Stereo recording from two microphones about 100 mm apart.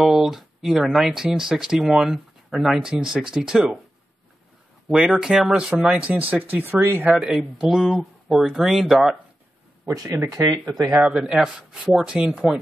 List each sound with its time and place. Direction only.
0.0 s speech: 5° right (ahead or behind)
4.8 s speech: 5° right (ahead or behind)
7.2 s speech: 5° right (ahead or behind)
9.8 s speech: 25° right (ahead or behind)
11.0 s speech: 10° right (ahead or behind)